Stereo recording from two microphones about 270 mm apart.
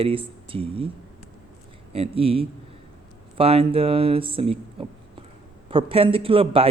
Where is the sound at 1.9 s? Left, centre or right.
Right.